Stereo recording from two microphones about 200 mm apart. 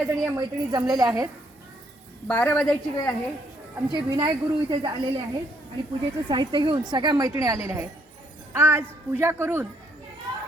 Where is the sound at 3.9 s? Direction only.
20° right (ahead or behind).